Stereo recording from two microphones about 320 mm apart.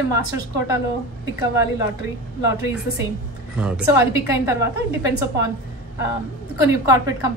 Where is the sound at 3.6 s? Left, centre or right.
Centre.